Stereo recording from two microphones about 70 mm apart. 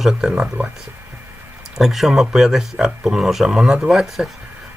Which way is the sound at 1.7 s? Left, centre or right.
Centre.